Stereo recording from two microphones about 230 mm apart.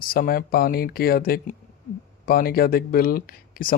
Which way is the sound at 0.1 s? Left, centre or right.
Left.